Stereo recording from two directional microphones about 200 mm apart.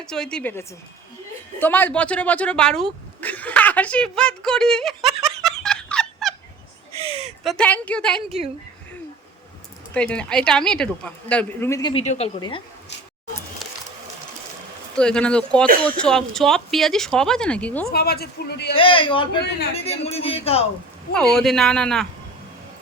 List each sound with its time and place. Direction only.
0.0 s a woman's voice: 5° left (ahead or behind)
7.0 s speech: 30° right (ahead or behind)
7.4 s a woman's voice: 5° left (ahead or behind)
9.9 s a woman's voice: 5° left (ahead or behind); by 12.0 s 20° left (ahead or behind)
12.0 s speech: 30° left (ahead or behind)
14.9 s a woman's voice: 5° left (ahead or behind)
17.9 s a man's voice: 50° left (ahead or behind)
18.7 s speech: 25° left (ahead or behind)
21.1 s a woman's voice: 5° left (ahead or behind)